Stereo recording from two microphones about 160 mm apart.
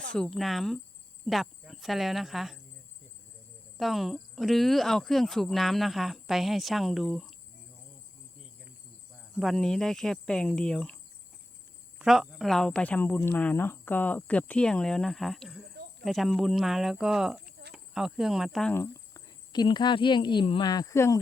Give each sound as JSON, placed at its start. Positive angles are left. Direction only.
{"t": 0.0, "sound": "a woman's voice", "side_deg": 5}
{"t": 3.8, "sound": "a woman's voice", "side_deg": 0}
{"t": 9.3, "sound": "a woman's voice", "side_deg": 0}
{"t": 11.9, "sound": "a woman's voice", "side_deg": -5}
{"t": 15.7, "sound": "cricket", "side_deg": -90}
{"t": 16.0, "sound": "a woman's voice", "side_deg": 0}
{"t": 18.7, "sound": "cricket", "side_deg": 15}
{"t": 19.5, "sound": "speech", "side_deg": 30}